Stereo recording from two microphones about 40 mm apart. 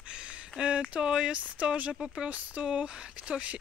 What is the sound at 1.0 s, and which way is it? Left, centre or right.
Speech, centre.